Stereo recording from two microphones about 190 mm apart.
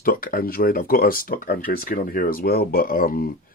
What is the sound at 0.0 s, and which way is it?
Speech, 50° left (ahead or behind).